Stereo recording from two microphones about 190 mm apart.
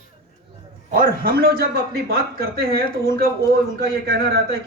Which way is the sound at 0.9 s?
50° right (ahead or behind).